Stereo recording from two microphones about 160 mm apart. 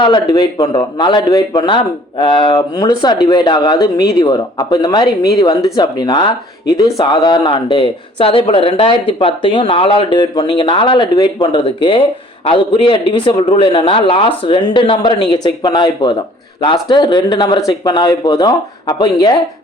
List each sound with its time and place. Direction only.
0.0 s a man's voice: 30° left (ahead or behind)